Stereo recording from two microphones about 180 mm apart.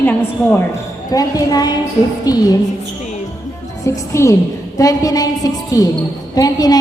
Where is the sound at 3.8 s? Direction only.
15° left (ahead or behind).